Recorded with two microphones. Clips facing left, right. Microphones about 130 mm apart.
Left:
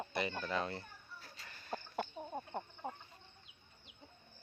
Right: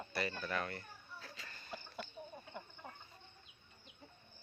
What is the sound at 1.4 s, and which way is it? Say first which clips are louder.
Cough: even; 5° left (ahead or behind).